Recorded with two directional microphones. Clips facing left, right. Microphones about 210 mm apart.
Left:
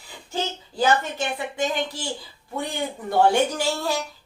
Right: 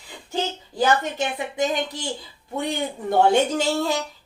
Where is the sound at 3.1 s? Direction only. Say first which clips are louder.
Right 1 dB; 20° right (ahead or behind).